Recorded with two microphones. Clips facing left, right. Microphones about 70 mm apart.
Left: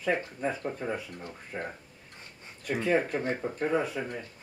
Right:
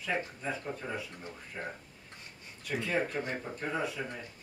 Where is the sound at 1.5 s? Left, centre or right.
Left.